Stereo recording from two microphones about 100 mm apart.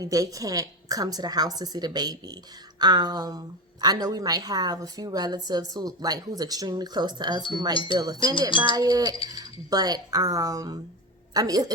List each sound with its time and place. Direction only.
0.0 s a woman's voice: 35° right (ahead or behind)
7.7 s speech: 60° left (ahead or behind)
7.9 s a woman's voice: 40° right (ahead or behind)
8.4 s speech: 55° left (ahead or behind)
8.7 s a woman's voice: 40° right (ahead or behind)